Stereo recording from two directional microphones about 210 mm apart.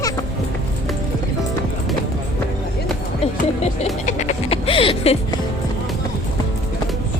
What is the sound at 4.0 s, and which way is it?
Music, 35° left (ahead or behind).